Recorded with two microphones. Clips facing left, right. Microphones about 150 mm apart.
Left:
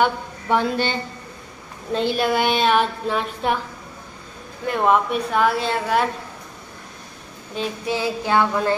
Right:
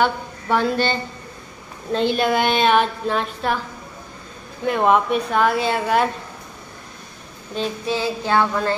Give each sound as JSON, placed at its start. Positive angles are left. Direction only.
{"t": 0.0, "sound": "speech", "side_deg": 15}
{"t": 1.9, "sound": "a woman's voice", "side_deg": 5}
{"t": 4.6, "sound": "a woman's voice", "side_deg": 0}
{"t": 7.5, "sound": "child singing", "side_deg": 10}